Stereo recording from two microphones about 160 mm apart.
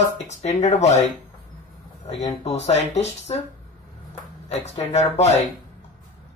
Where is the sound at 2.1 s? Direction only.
40° left (ahead or behind).